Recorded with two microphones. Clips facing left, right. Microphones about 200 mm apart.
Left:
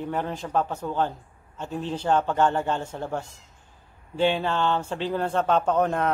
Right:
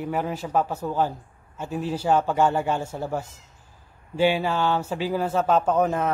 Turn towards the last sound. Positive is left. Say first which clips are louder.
# right 1 dB
turn(degrees=-5)  # may be behind; listen again after turning